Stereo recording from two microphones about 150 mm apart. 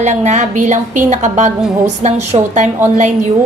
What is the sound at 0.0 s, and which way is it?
A woman's voice, 50° right (ahead or behind).